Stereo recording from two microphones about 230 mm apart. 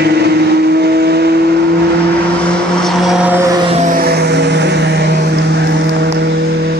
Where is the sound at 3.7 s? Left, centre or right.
Right.